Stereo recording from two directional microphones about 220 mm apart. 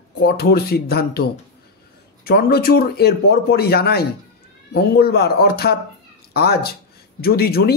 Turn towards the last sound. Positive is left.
turn(degrees=45)  # may be behind; listen again after turning